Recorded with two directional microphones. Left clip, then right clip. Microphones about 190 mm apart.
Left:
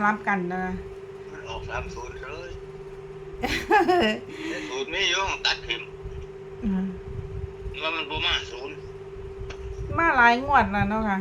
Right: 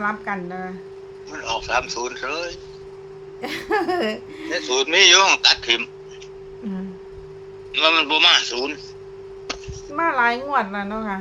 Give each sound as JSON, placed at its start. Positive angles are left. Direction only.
{"t": 0.0, "sound": "a woman's voice", "side_deg": 5}
{"t": 1.5, "sound": "a man's voice", "side_deg": -70}
{"t": 3.4, "sound": "a woman's voice", "side_deg": 5}
{"t": 4.7, "sound": "a man's voice", "side_deg": -70}
{"t": 7.7, "sound": "a man's voice", "side_deg": -70}
{"t": 9.9, "sound": "a woman's voice", "side_deg": 5}